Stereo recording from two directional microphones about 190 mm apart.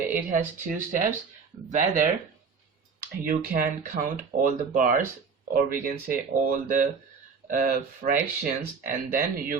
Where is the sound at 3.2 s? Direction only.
45° right (ahead or behind).